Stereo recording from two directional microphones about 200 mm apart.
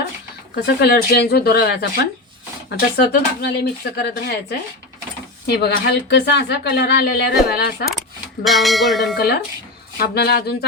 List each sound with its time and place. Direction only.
0.5 s speech: 50° left (ahead or behind)
8.4 s a sound: centre (ahead or behind)
9.1 s speech: 55° left (ahead or behind)